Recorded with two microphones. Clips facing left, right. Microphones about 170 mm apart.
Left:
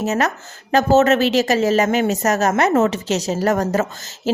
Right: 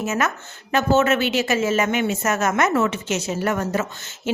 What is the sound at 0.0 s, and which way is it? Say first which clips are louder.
Speech: left 3 dB; 35° left (ahead or behind).